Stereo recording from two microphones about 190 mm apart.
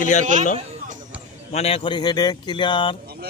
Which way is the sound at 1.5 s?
30° left (ahead or behind).